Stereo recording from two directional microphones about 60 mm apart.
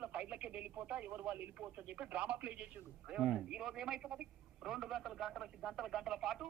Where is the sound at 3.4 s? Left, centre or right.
Centre.